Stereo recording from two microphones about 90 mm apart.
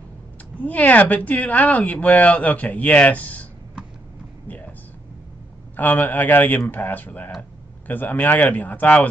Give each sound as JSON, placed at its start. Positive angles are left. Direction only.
{"t": 0.6, "sound": "speech", "side_deg": 15}
{"t": 4.5, "sound": "a sound", "side_deg": 15}
{"t": 5.8, "sound": "speech", "side_deg": 20}